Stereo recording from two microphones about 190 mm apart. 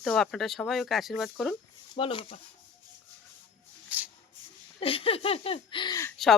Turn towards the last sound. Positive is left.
turn(degrees=20)  # may be behind; listen again after turning